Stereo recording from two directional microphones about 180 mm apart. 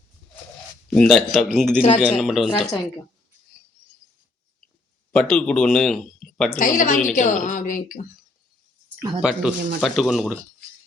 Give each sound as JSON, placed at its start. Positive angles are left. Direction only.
{"t": 0.9, "sound": "speech", "side_deg": 5}
{"t": 5.1, "sound": "speech", "side_deg": 5}
{"t": 6.6, "sound": "speech", "side_deg": 45}
{"t": 9.0, "sound": "speech", "side_deg": -5}